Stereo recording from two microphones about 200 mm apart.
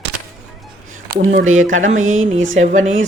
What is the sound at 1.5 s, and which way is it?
Music, 40° right (ahead or behind).